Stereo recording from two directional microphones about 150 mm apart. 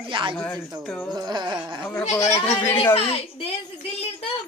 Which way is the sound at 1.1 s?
30° right (ahead or behind).